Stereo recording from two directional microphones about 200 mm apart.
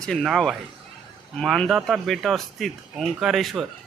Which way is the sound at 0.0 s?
Centre (ahead or behind).